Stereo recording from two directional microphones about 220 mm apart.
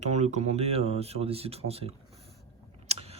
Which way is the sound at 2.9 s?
30° right (ahead or behind).